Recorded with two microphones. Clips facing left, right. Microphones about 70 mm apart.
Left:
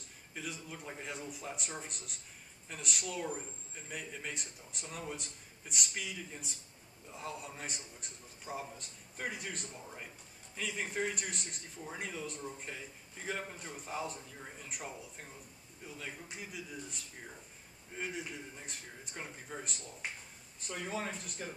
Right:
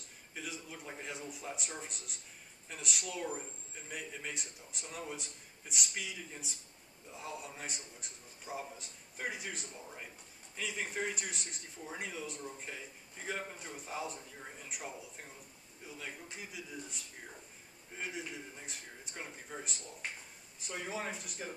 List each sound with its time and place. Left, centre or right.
0.3 s a man's voice: centre